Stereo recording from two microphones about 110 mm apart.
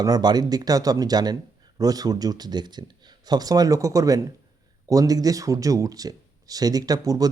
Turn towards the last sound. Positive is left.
turn(degrees=-35)  # may be behind; listen again after turning